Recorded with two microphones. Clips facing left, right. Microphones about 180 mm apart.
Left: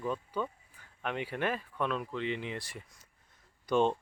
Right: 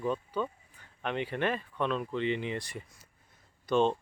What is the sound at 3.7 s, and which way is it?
Speech, 10° left (ahead or behind).